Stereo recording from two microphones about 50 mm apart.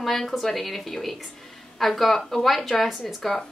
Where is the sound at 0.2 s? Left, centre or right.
Centre.